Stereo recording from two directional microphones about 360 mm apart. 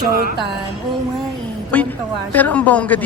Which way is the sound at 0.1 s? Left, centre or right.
Right.